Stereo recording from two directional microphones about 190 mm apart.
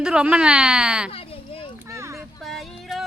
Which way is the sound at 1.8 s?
15° right (ahead or behind).